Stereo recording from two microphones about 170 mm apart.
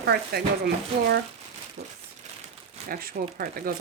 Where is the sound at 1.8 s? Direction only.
90° right.